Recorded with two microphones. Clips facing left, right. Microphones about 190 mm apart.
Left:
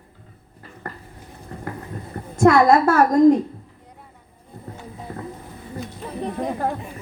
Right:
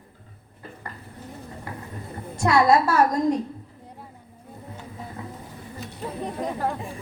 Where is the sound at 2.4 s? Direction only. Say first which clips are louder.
Left 5 dB; 50° left (ahead or behind).